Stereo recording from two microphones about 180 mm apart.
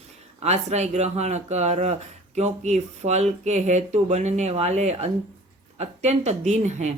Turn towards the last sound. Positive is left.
turn(degrees=-40)  # may be behind; listen again after turning